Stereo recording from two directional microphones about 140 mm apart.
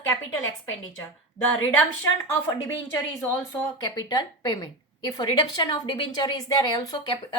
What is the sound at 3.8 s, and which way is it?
A woman's voice, 30° left (ahead or behind).